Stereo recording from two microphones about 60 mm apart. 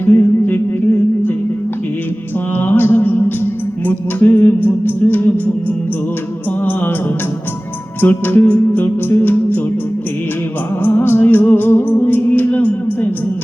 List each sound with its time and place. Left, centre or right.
0.0 s music: left
2.6 s music: left
8.0 s music: left
10.8 s music: left